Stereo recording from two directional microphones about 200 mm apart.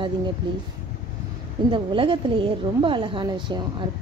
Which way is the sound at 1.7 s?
25° right (ahead or behind).